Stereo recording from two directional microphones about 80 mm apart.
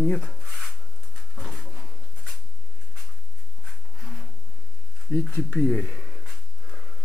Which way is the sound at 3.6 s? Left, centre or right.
Centre.